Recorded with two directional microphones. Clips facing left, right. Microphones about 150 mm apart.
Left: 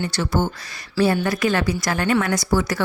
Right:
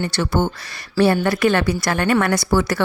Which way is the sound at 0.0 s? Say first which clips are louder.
Right 2 dB; 60° right (ahead or behind).